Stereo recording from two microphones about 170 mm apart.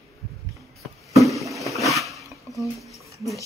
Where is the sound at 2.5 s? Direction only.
20° left (ahead or behind).